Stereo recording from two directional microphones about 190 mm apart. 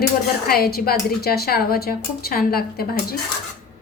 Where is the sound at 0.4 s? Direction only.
55° left (ahead or behind).